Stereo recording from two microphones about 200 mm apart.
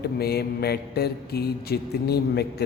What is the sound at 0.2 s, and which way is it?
Mantra, 50° left (ahead or behind).